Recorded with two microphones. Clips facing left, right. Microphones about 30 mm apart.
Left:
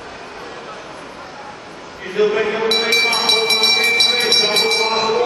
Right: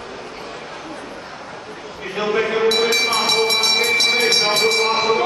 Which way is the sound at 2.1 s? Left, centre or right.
Centre.